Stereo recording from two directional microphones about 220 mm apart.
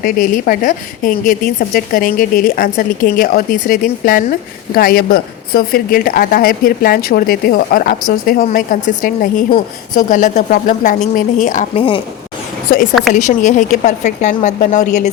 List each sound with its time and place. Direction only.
0.0 s a woman's voice: 40° left (ahead or behind)
13.1 s a woman's voice: 35° left (ahead or behind)